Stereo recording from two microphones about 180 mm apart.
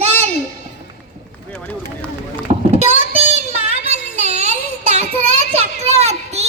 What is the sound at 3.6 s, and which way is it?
Child singing, 40° right (ahead or behind).